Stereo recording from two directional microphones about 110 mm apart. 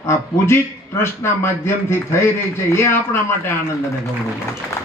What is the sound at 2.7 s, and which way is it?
Speech, 20° left (ahead or behind).